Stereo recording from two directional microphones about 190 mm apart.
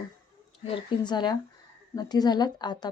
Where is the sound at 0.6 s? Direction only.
25° left (ahead or behind).